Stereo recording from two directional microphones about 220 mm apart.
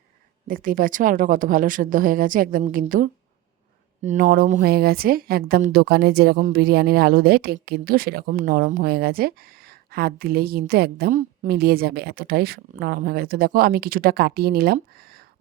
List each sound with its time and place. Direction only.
0.4 s a woman's voice: 40° right (ahead or behind)